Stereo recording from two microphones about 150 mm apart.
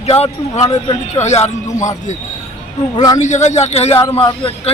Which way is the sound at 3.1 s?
55° left (ahead or behind).